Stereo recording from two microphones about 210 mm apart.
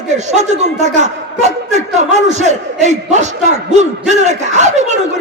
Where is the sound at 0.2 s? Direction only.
35° right (ahead or behind).